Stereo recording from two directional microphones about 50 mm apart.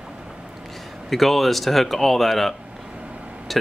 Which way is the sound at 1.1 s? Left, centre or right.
Centre.